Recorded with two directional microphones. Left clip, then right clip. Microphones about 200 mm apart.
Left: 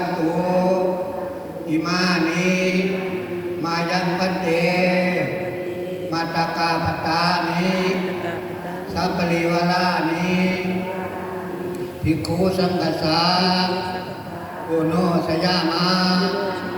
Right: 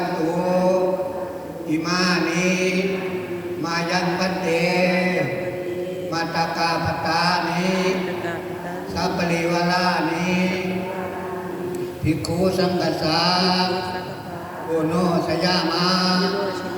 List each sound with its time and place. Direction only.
0.5 s chant: 55° right (ahead or behind)
1.9 s chant: 55° right (ahead or behind)
6.1 s chant: 55° right (ahead or behind)
9.0 s chant: 55° right (ahead or behind)
12.0 s chant: 55° right (ahead or behind)
14.9 s mantra: 55° right (ahead or behind)